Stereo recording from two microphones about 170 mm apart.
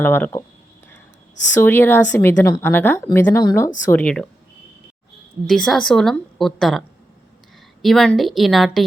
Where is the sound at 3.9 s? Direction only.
5° left (ahead or behind).